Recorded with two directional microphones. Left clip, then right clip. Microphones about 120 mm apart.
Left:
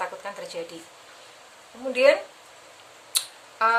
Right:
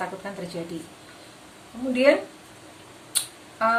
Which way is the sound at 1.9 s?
30° left (ahead or behind).